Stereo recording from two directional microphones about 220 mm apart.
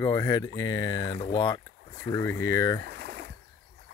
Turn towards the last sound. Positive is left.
turn(degrees=-50)  # may be behind; listen again after turning